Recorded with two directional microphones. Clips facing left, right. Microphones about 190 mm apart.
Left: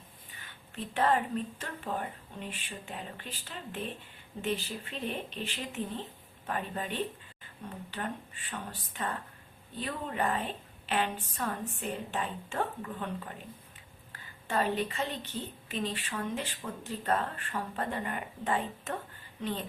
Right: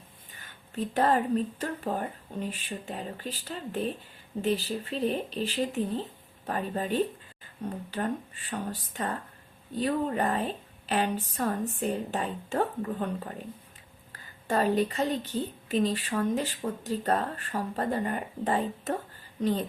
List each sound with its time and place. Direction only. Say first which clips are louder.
0.3 s a woman's voice: right 8 dB; 40° right (ahead or behind)
14.4 s a woman's voice: right 5 dB; 40° right (ahead or behind)